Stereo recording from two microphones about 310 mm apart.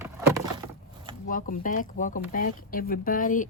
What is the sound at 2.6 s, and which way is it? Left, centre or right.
Speech, left.